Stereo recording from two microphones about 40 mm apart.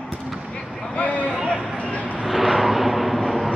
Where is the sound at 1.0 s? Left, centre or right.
Left.